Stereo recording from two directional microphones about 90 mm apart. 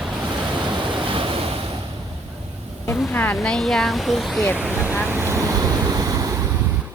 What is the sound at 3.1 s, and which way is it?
Speech, 20° left (ahead or behind).